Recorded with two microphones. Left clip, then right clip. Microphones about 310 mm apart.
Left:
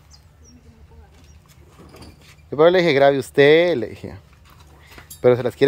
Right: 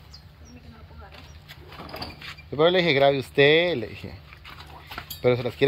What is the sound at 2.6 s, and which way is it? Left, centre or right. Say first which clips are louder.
Speech: left 5 dB; centre.